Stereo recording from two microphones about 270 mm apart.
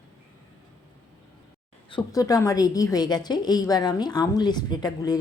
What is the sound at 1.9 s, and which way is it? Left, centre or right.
A woman's voice, centre.